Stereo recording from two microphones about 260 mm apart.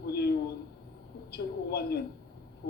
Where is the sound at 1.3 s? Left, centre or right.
Left.